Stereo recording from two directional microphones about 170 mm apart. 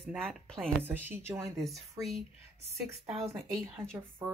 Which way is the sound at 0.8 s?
10° right (ahead or behind).